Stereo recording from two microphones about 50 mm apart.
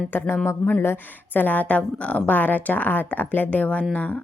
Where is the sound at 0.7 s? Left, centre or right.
Left.